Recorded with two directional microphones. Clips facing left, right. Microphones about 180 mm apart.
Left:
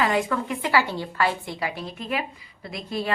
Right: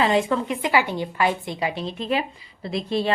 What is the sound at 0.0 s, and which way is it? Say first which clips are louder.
A woman's voice: right 3 dB; 25° right (ahead or behind).